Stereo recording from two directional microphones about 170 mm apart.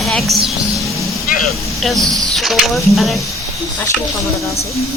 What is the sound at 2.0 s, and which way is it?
Speech, 20° right (ahead or behind).